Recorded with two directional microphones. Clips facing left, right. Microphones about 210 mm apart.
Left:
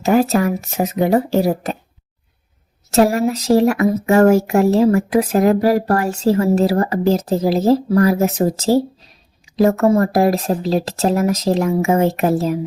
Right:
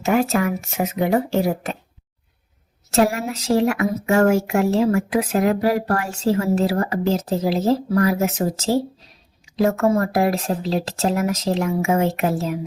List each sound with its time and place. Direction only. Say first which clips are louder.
0.0 s speech: left 4 dB; 35° left (ahead or behind)
2.9 s speech: left 5 dB; 40° left (ahead or behind)